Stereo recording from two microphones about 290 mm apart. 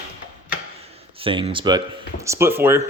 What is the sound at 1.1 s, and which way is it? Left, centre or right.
Speech, centre.